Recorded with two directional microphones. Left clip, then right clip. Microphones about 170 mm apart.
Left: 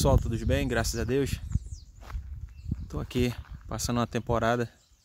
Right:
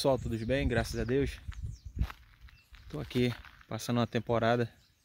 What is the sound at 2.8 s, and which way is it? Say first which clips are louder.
Speech: left 2 dB; 5° left (ahead or behind).